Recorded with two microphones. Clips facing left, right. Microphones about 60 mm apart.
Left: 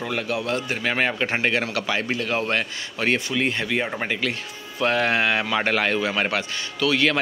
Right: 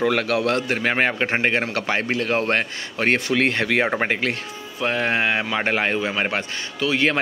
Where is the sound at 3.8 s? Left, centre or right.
Right.